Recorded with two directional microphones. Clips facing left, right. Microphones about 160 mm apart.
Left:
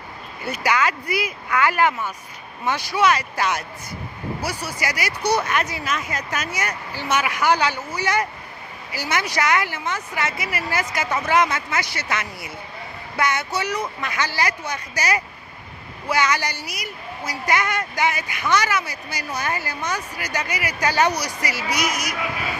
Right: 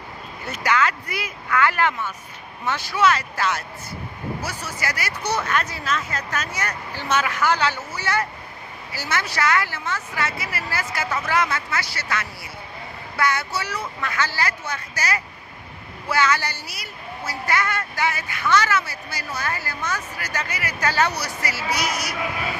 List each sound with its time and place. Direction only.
0.5 s speech: 10° left (ahead or behind)